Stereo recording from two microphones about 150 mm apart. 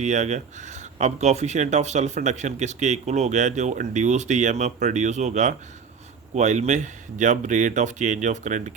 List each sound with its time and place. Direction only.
0.0 s speech: 50° right (ahead or behind)